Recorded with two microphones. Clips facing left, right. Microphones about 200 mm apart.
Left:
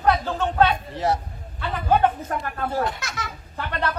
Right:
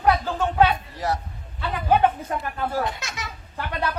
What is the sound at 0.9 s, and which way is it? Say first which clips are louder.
Speech: left 3 dB; 25° left (ahead or behind).